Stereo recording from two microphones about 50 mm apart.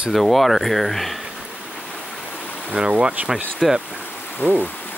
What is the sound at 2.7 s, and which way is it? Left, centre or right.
Speech, centre.